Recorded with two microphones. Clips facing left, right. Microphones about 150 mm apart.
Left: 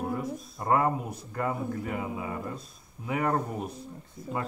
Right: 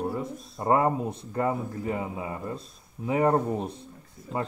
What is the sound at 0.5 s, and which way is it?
Speech, 25° right (ahead or behind).